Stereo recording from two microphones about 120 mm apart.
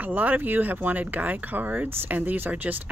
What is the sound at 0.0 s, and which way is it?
Speech, 15° right (ahead or behind).